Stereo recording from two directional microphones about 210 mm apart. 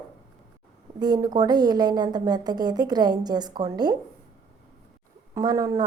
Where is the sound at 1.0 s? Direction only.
20° right (ahead or behind).